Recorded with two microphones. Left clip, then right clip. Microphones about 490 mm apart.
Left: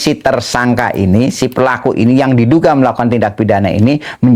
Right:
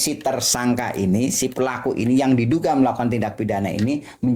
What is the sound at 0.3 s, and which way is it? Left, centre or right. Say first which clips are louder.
Speech: left 9 dB; left.